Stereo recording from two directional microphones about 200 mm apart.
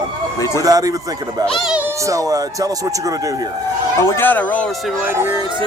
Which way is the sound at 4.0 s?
15° left (ahead or behind).